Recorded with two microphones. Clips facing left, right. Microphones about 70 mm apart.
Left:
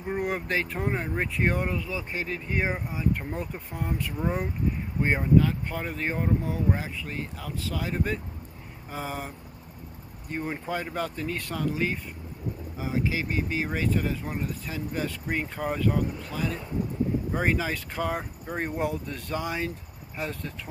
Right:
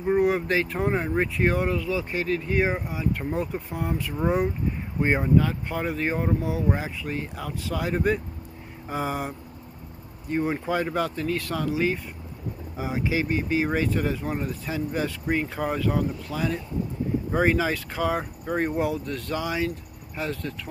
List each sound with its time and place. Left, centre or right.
0.2 s speech: centre
2.6 s speech: centre
3.1 s speech: centre
5.0 s speech: centre
5.4 s speech: centre
10.3 s speech: centre
12.7 s speech: centre
13.2 s speech: centre